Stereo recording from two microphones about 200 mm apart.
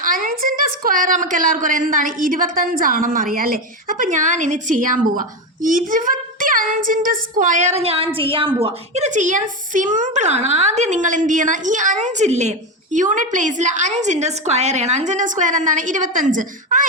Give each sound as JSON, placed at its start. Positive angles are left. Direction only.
{"t": 0.0, "sound": "a woman's voice", "side_deg": -45}